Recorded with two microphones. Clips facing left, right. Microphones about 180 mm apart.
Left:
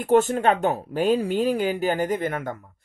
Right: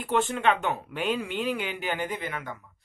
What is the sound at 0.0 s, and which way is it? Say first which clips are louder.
Speech: left 6 dB; 45° left (ahead or behind).